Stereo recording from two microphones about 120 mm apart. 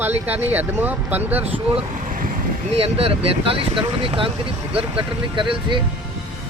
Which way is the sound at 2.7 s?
55° right (ahead or behind).